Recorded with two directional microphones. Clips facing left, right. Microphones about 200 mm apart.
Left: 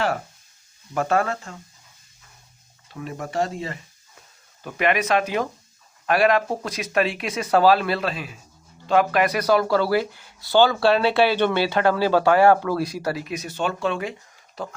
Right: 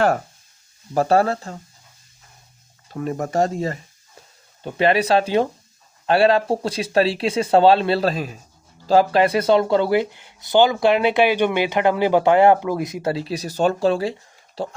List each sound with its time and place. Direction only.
0.9 s speech: 35° right (ahead or behind)
2.9 s speech: 40° right (ahead or behind)
4.6 s speech: 30° right (ahead or behind)
8.9 s speech: 30° right (ahead or behind)